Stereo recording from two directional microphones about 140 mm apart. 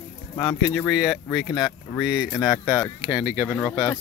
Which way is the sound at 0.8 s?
Centre (ahead or behind).